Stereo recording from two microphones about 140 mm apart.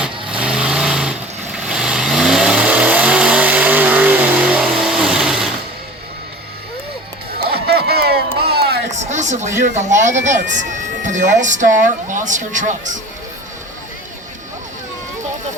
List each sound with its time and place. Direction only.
0.0 s vehicle: 5° right (ahead or behind)
7.5 s a sound: 90° right; by 9.5 s 60° right (ahead or behind)
9.6 s speech: 60° right (ahead or behind)